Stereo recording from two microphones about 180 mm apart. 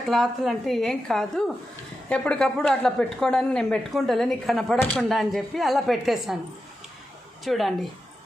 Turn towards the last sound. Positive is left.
turn(degrees=0)  # may be behind; listen again after turning